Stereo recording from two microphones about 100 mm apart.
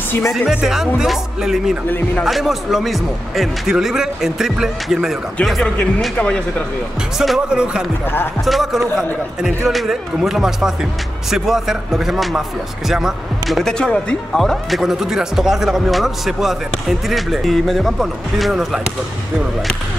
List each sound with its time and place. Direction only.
0.3 s speech: 5° right (ahead or behind)
1.9 s speech: 20° left (ahead or behind)
2.2 s speech: centre (ahead or behind)
7.2 s speech: 5° right (ahead or behind)